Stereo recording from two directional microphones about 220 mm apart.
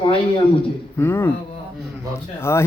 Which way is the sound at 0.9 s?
10° left (ahead or behind).